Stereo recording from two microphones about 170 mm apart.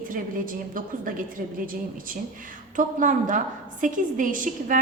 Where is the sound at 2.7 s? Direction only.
50° right (ahead or behind).